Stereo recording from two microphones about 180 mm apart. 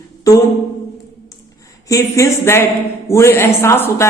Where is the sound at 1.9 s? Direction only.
15° left (ahead or behind).